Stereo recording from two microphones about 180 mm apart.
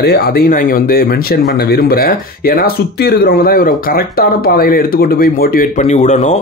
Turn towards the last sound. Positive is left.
turn(degrees=40)  # may be behind; listen again after turning